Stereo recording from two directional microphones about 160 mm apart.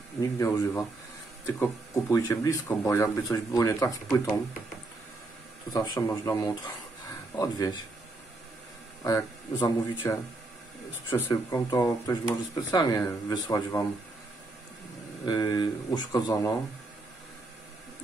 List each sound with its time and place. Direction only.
0.2 s speech: 20° left (ahead or behind)
5.7 s speech: 20° left (ahead or behind)
9.0 s speech: 20° left (ahead or behind)
11.1 s speech: 15° left (ahead or behind)
15.2 s speech: 25° left (ahead or behind)